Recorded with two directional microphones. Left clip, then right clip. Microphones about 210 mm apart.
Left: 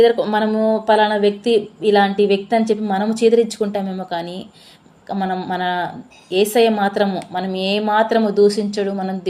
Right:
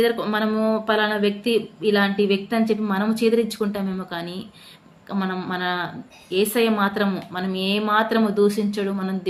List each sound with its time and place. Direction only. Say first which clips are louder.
0.0 s speech: left 7 dB; centre (ahead or behind)